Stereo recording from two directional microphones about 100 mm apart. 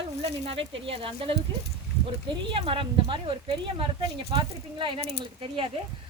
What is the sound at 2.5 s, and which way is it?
Speech, 60° right (ahead or behind).